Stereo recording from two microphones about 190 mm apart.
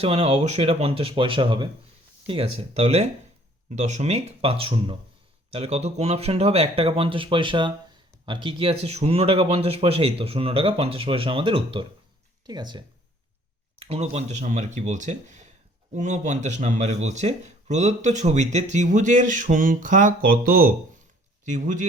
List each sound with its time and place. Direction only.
0.0 s speech: 30° right (ahead or behind)